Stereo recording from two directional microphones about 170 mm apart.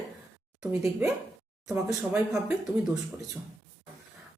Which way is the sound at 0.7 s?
20° right (ahead or behind).